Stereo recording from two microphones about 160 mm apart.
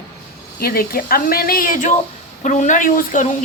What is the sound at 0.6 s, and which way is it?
A woman's voice, 70° left (ahead or behind).